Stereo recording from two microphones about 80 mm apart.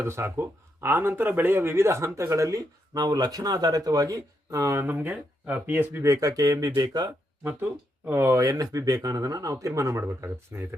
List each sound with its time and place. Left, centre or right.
0.0 s speech: right
4.8 s speech: right
6.0 s speech: right
6.7 s speech: right
7.4 s speech: right
8.4 s speech: right